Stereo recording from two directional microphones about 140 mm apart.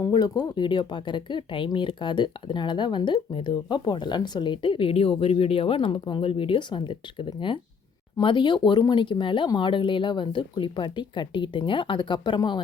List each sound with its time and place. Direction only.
0.0 s speech: 30° left (ahead or behind)